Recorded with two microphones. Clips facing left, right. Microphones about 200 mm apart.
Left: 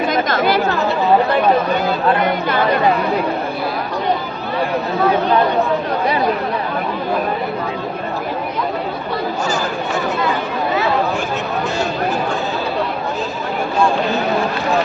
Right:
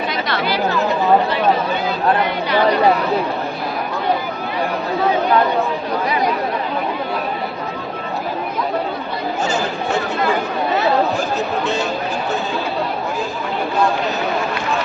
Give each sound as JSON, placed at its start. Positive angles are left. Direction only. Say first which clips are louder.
{"t": 0.1, "sound": "speech", "louder": "left 5 dB", "side_deg": 45}